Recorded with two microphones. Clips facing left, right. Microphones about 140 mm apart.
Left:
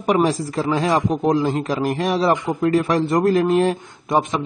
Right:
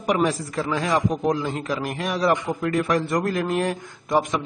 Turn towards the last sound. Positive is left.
turn(degrees=25)  # may be behind; listen again after turning